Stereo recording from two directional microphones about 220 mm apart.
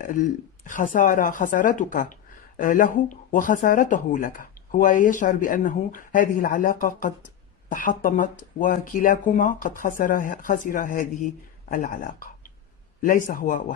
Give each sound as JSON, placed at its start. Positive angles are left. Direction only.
{"t": 0.0, "sound": "speech", "side_deg": 40}